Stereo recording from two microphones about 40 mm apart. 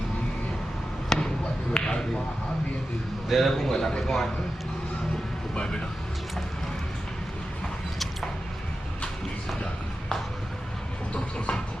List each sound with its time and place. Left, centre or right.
1.1 s a sound: centre
3.2 s a man's voice: centre
5.5 s speech: left
11.1 s train: left